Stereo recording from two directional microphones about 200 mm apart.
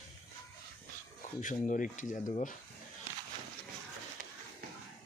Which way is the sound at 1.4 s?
40° left (ahead or behind).